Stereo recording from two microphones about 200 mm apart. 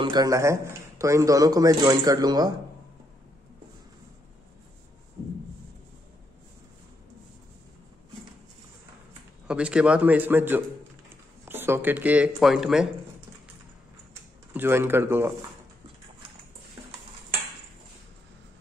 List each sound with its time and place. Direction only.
0.0 s a man's voice: 20° right (ahead or behind)
9.5 s a man's voice: 5° right (ahead or behind)
14.5 s a man's voice: 10° right (ahead or behind)